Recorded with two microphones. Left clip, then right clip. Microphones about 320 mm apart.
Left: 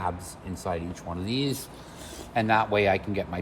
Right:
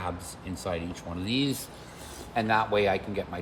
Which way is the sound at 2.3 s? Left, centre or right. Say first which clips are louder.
Left 2 dB; left.